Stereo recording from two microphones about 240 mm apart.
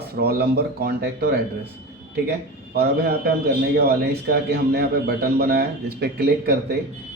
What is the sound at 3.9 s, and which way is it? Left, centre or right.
Speech, right.